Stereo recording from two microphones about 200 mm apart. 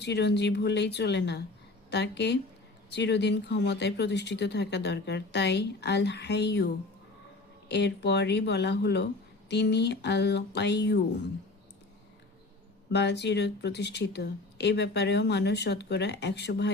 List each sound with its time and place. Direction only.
0.0 s speech: 55° left (ahead or behind)
12.9 s speech: 60° left (ahead or behind)